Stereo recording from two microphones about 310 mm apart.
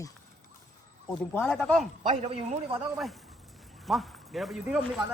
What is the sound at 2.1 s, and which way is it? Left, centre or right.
Speech, centre.